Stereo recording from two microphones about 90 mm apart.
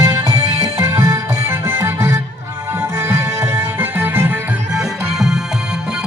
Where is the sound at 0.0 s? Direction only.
45° right (ahead or behind); by 4.3 s 25° right (ahead or behind).